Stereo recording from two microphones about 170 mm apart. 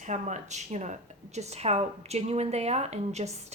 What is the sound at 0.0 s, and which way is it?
A woman's voice, 45° right (ahead or behind).